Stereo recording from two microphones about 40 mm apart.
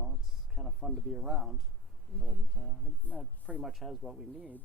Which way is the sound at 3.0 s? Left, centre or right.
Left.